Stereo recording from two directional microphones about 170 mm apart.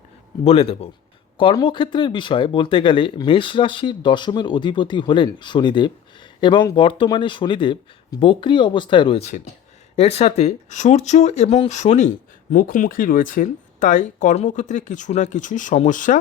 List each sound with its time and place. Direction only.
0.4 s speech: 35° left (ahead or behind)